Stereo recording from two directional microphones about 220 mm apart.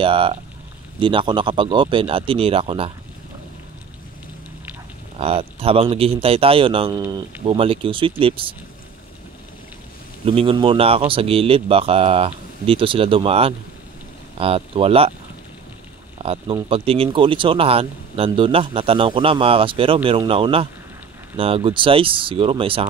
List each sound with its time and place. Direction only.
0.0 s speech: 25° right (ahead or behind)
5.2 s speech: 25° right (ahead or behind)
10.2 s speech: 25° right (ahead or behind)
16.2 s speech: 25° right (ahead or behind)